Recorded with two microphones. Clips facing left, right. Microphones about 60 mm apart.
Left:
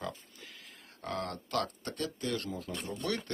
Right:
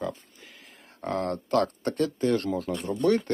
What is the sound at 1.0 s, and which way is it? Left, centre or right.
Speech, right.